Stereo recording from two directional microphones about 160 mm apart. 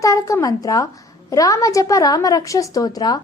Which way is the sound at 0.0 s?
20° left (ahead or behind).